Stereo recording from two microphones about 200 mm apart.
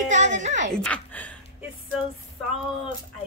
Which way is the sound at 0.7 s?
5° left (ahead or behind).